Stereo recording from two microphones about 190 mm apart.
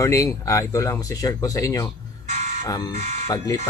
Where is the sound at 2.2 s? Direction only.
40° right (ahead or behind).